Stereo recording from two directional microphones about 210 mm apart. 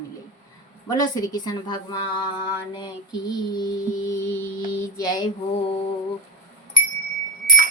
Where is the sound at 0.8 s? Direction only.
20° left (ahead or behind).